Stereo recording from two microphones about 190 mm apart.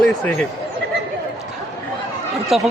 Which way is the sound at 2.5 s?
Centre (ahead or behind).